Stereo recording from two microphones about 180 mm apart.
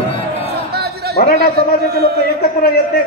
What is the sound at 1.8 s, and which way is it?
Speech, 65° right (ahead or behind).